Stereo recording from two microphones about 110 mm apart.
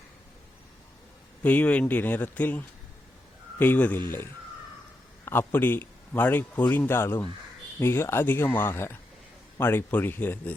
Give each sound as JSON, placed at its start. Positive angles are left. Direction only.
{"t": 1.4, "sound": "speech", "side_deg": 15}
{"t": 5.2, "sound": "a man's voice", "side_deg": 20}